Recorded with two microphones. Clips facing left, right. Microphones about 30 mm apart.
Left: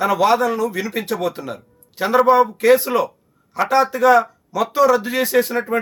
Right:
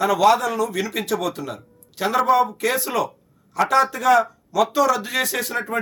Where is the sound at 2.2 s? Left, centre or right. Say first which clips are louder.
Left 4 dB; left.